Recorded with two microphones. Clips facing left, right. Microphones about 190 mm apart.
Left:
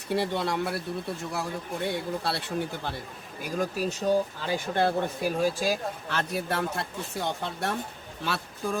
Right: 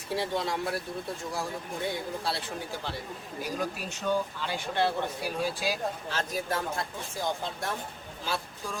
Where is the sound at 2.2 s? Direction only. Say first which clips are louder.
Left 4 dB; 65° left (ahead or behind).